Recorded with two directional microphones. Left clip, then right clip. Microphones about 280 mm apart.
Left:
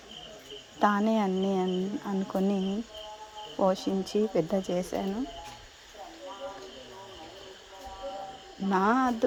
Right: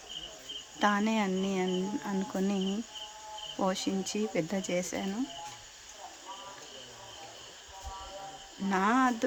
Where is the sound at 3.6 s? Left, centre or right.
Centre.